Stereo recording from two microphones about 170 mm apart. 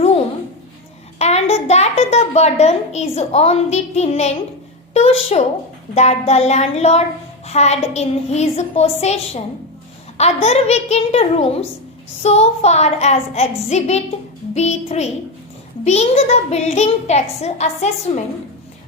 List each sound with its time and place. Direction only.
1.2 s a child's voice: 40° left (ahead or behind)